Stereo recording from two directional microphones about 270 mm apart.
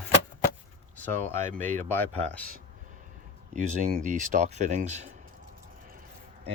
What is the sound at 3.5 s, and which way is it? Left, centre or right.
Speech, right.